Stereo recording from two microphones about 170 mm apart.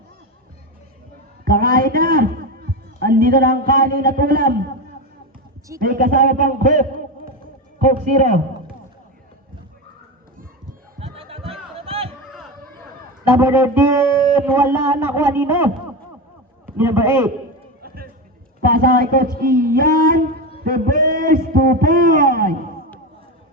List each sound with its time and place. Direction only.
1.5 s a man's voice: 55° right (ahead or behind)
5.8 s a man's voice: 55° right (ahead or behind)
11.0 s a sound: 35° right (ahead or behind)
13.2 s speech: 15° right (ahead or behind)
17.8 s a sound: 60° right (ahead or behind)
18.6 s a man's voice: 60° right (ahead or behind)